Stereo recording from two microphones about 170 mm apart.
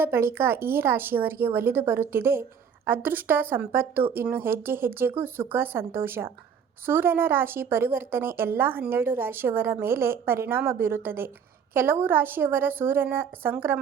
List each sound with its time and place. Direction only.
0.0 s a woman's voice: 15° right (ahead or behind)